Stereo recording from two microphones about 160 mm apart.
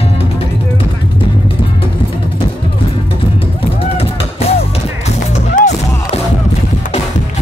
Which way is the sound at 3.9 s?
35° left (ahead or behind).